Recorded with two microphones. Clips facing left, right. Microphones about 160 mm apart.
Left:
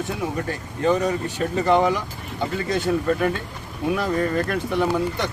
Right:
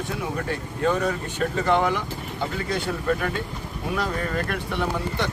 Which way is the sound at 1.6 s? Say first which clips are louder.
Left 4 dB; 20° left (ahead or behind).